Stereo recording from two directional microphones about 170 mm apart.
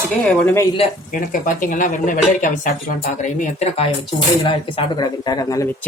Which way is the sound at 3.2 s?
40° left (ahead or behind).